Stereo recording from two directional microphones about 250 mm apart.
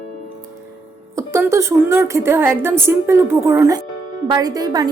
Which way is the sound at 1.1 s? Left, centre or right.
Centre.